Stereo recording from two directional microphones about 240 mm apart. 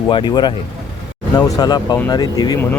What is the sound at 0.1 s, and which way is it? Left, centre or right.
Speech, centre.